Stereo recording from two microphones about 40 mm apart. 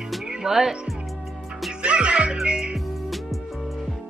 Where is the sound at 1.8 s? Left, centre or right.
Right.